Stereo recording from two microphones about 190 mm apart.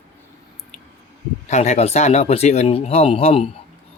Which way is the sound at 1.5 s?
35° left (ahead or behind).